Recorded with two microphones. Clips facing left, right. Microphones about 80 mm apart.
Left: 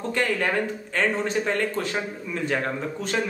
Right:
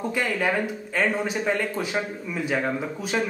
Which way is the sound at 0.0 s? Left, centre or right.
Centre.